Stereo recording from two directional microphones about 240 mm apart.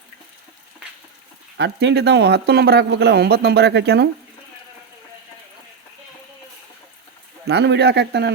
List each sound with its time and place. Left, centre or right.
1.5 s speech: right
7.4 s speech: right